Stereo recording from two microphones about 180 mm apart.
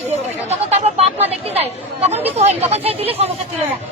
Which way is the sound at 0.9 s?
35° right (ahead or behind).